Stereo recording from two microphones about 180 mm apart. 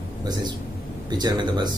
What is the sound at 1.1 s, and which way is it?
Speech, 25° right (ahead or behind).